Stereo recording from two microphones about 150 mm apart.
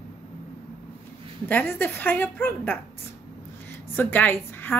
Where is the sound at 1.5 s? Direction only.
10° left (ahead or behind).